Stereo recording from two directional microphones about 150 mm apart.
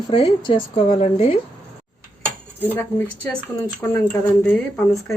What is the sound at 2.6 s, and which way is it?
Speech, 15° left (ahead or behind).